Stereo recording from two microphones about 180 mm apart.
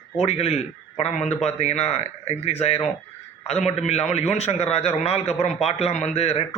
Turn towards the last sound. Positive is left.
turn(degrees=35)  # may be behind; listen again after turning